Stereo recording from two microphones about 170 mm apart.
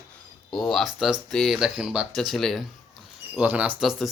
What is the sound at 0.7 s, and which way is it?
Speech, centre (ahead or behind).